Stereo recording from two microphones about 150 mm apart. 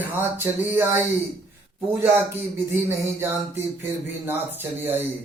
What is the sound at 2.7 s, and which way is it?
Speech, 15° right (ahead or behind).